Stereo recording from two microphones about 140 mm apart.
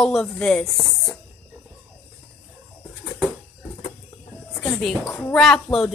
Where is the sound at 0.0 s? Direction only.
5° left (ahead or behind).